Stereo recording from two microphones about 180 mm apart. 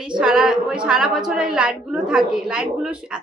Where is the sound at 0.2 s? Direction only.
5° right (ahead or behind).